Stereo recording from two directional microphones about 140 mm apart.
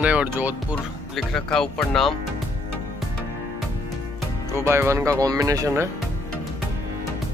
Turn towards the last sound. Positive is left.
turn(degrees=-25)  # may be behind; listen again after turning